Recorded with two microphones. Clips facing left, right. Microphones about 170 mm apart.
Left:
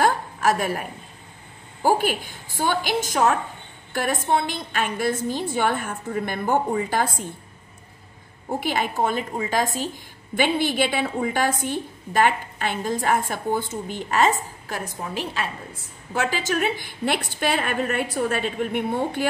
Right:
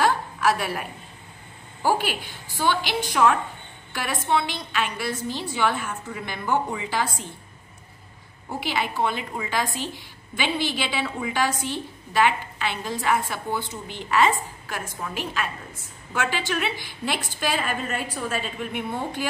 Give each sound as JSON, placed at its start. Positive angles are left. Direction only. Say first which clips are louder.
{"t": 0.0, "sound": "a sound", "louder": "left 1 dB", "side_deg": 45}
{"t": 1.8, "sound": "a woman's voice", "louder": "left 3 dB", "side_deg": 45}
{"t": 8.5, "sound": "a woman's voice", "louder": "left 3 dB", "side_deg": 50}